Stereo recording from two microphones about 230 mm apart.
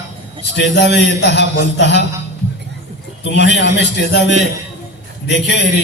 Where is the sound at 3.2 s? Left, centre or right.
Left.